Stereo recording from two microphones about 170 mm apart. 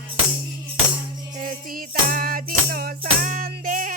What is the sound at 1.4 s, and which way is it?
Music, 55° right (ahead or behind).